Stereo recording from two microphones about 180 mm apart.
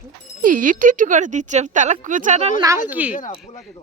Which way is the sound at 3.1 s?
45° left (ahead or behind).